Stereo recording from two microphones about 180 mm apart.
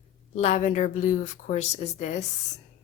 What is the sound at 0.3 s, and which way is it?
A woman's voice, 40° left (ahead or behind).